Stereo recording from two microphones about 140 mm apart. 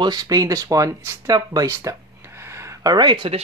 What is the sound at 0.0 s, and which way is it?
Speech, 30° right (ahead or behind).